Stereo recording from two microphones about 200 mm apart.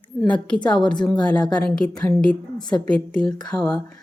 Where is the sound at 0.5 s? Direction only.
20° left (ahead or behind).